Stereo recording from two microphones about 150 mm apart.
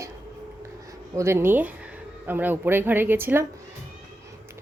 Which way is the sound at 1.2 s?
15° right (ahead or behind).